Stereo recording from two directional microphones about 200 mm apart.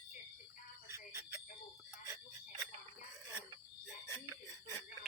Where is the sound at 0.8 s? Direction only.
15° right (ahead or behind).